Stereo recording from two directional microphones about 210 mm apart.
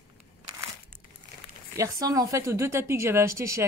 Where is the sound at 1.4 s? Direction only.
30° left (ahead or behind).